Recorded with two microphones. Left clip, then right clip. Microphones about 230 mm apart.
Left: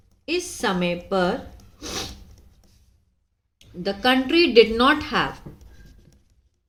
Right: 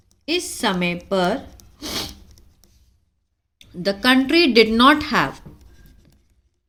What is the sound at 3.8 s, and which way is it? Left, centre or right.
A woman's voice, right.